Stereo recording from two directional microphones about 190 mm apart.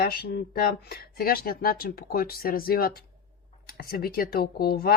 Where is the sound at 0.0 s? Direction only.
55° left (ahead or behind).